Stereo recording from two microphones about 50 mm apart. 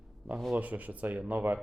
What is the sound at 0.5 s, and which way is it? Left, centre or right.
Speech, right.